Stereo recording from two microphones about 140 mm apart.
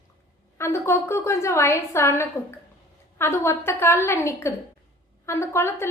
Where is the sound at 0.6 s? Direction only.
20° left (ahead or behind).